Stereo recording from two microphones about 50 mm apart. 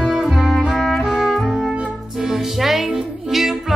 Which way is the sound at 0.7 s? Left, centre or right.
Centre.